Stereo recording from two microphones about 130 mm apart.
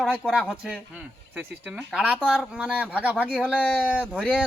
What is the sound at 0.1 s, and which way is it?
Speech, 5° right (ahead or behind).